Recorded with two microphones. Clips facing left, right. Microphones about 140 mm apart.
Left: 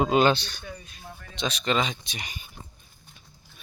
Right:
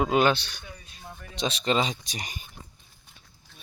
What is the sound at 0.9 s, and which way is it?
Speech, 30° right (ahead or behind).